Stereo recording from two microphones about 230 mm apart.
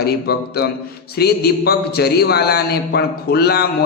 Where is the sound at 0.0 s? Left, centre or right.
Left.